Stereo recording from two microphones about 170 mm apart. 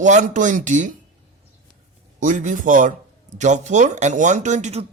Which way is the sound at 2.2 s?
45° right (ahead or behind).